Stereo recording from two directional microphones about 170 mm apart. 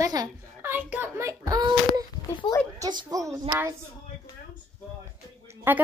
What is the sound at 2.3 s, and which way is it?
Speech, 25° left (ahead or behind).